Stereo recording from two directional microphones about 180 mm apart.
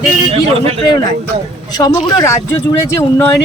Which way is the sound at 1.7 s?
20° left (ahead or behind).